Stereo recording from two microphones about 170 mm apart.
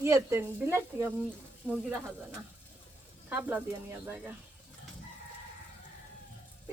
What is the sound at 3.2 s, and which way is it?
Speech, 10° right (ahead or behind).